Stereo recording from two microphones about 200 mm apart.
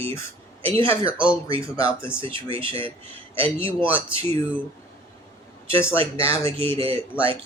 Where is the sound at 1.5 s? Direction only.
25° right (ahead or behind).